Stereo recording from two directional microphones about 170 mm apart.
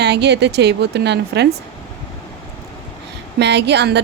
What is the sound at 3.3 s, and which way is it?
Speech, 85° right.